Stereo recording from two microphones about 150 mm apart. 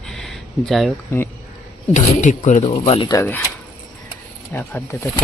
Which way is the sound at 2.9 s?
35° left (ahead or behind).